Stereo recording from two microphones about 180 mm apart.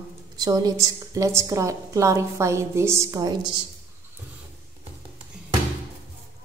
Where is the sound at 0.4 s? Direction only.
20° right (ahead or behind).